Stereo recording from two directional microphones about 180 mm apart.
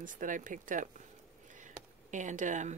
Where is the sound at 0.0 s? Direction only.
45° right (ahead or behind).